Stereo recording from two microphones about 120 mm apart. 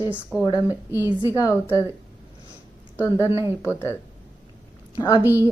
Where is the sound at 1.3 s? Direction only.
25° left (ahead or behind).